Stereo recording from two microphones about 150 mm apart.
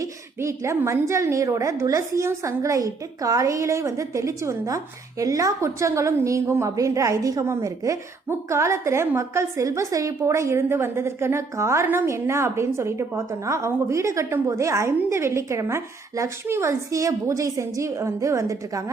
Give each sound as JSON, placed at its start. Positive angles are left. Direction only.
{"t": 0.0, "sound": "a woman's voice", "side_deg": -20}